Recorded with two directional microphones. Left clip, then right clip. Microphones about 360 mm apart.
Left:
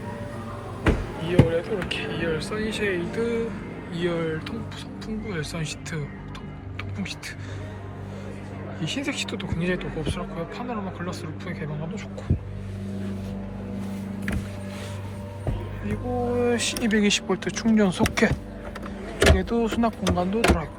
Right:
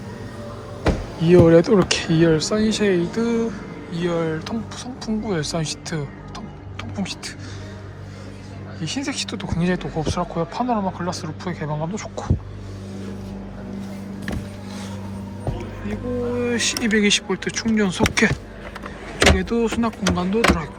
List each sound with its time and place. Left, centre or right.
0.9 s speech: centre
8.8 s speech: centre
16.4 s speech: centre